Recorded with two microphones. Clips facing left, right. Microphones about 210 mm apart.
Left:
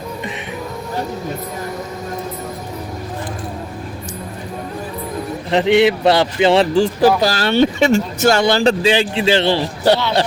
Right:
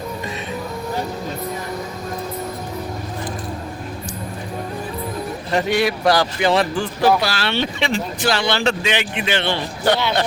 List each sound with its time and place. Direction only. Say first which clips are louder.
5.5 s a man's voice: left 6 dB; 20° left (ahead or behind)
7.2 s speech: left 8 dB; 40° left (ahead or behind)